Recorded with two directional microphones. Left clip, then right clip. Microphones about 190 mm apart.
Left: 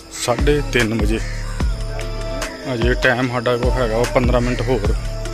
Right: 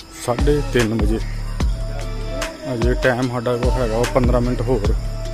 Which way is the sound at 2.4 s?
5° right (ahead or behind).